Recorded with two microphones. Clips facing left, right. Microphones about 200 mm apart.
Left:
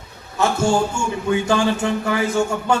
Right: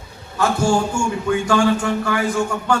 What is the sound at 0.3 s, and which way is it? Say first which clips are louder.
A man's voice: even; 25° left (ahead or behind).